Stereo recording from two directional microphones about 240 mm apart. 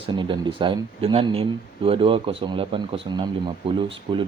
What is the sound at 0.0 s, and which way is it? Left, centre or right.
Speech, right.